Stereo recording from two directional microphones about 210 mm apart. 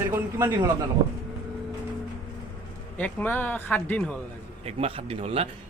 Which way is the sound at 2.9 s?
10° left (ahead or behind).